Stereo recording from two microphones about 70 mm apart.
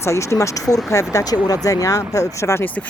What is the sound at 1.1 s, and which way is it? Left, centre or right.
Speech, left.